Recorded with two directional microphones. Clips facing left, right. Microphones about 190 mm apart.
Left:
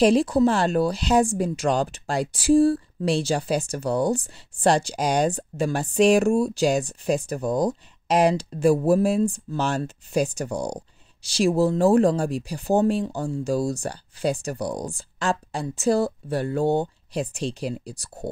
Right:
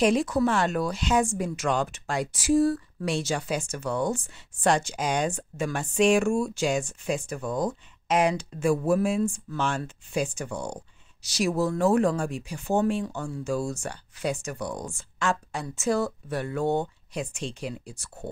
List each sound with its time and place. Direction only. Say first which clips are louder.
0.0 s speech: left 5 dB; 30° left (ahead or behind)